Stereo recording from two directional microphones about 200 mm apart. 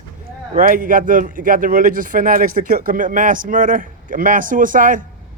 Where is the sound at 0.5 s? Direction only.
45° right (ahead or behind).